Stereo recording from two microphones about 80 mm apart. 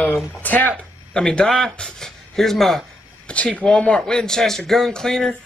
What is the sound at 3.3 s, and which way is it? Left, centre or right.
Speech, centre.